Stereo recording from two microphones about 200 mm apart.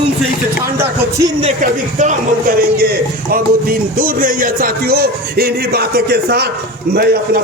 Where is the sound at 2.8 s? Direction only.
50° right (ahead or behind).